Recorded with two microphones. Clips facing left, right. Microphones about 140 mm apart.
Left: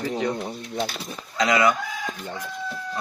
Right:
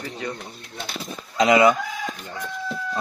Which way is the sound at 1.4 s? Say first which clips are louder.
Right 4 dB; 20° right (ahead or behind).